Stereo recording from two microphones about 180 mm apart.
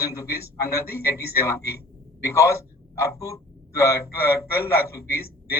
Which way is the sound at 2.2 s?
15° left (ahead or behind).